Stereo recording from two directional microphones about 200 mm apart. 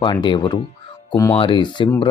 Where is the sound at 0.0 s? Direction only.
25° left (ahead or behind).